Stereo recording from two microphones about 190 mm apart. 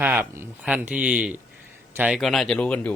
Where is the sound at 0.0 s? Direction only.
10° right (ahead or behind).